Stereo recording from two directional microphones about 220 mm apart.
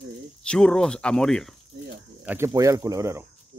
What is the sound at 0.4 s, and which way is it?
Speech, 5° left (ahead or behind).